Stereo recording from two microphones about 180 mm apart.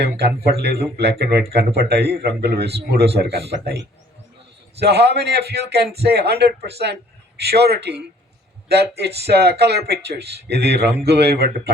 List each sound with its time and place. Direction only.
0.0 s a man's voice: 65° right (ahead or behind)